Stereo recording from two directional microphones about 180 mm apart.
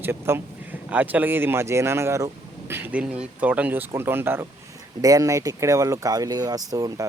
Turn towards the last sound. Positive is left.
turn(degrees=-20)  # may be behind; listen again after turning